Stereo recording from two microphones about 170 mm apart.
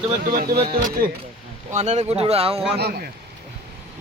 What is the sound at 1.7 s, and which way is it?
Speech, 40° right (ahead or behind).